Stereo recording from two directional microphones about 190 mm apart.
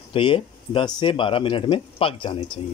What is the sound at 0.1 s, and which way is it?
Speech, 25° left (ahead or behind).